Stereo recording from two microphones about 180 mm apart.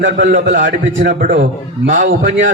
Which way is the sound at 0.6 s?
90° right.